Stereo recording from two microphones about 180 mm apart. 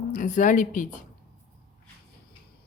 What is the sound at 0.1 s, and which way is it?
Speech, 45° left (ahead or behind).